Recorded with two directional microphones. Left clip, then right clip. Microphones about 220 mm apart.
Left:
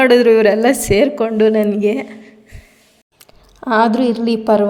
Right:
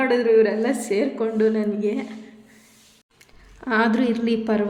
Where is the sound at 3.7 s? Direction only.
20° left (ahead or behind).